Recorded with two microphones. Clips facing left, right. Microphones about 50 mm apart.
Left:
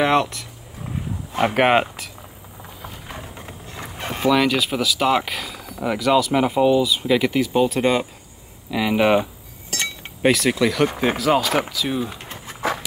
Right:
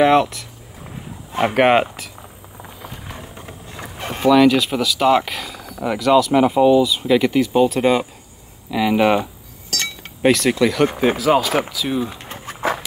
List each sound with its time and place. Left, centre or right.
0.0 s speech: centre
1.5 s speech: centre
3.3 s speech: centre
12.5 s a sound: centre